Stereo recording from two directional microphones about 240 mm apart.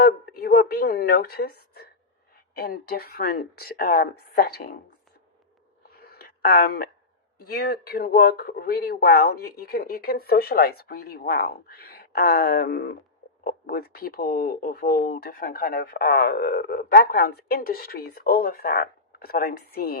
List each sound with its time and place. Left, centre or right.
0.0 s a woman's voice: left
6.0 s a sound: left
7.5 s speech: left